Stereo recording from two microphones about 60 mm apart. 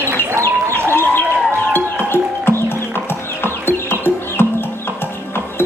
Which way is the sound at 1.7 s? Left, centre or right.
Left.